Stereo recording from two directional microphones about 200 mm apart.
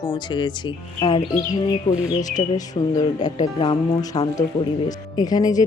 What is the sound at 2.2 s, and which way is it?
Speech, 40° left (ahead or behind).